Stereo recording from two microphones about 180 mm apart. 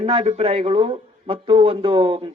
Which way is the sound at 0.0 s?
35° right (ahead or behind).